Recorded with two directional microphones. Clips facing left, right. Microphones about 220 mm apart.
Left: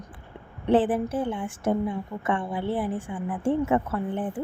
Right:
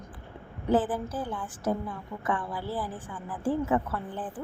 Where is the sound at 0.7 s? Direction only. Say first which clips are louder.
Left 5 dB; 30° left (ahead or behind).